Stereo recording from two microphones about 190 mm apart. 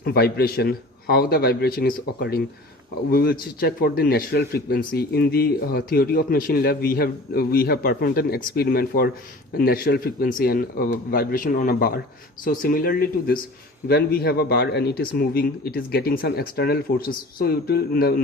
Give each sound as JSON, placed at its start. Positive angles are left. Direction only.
{"t": 0.0, "sound": "a man's voice", "side_deg": 55}